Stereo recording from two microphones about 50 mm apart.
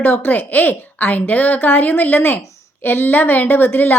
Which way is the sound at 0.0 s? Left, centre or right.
Left.